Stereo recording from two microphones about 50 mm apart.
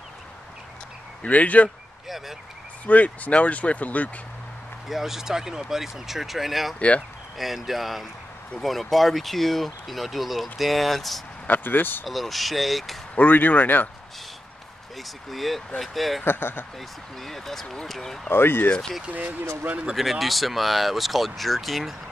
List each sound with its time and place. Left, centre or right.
1.2 s speech: left
2.0 s speech: centre
2.9 s speech: left
4.8 s speech: centre
11.4 s speech: left
12.1 s speech: centre
13.1 s speech: left
15.0 s speech: centre
16.3 s speech: left
17.2 s speech: centre
18.3 s speech: left
19.0 s speech: right
20.0 s speech: centre